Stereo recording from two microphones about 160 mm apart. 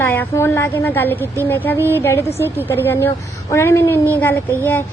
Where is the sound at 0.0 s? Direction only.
15° left (ahead or behind).